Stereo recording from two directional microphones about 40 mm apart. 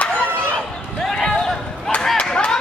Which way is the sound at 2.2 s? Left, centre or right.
Left.